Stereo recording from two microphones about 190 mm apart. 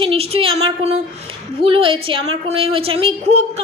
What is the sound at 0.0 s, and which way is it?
A woman's voice, 30° right (ahead or behind).